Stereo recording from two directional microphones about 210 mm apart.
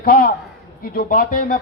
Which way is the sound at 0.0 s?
45° left (ahead or behind).